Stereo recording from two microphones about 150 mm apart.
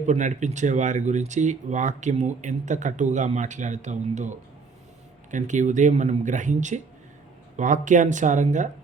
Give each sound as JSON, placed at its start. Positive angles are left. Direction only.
{"t": 0.0, "sound": "speech", "side_deg": -55}